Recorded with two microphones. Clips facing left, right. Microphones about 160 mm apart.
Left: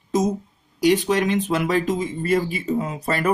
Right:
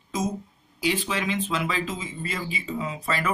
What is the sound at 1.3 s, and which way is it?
Speech, 60° left (ahead or behind).